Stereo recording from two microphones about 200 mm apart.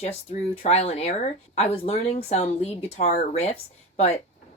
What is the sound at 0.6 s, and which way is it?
Speech, 30° left (ahead or behind).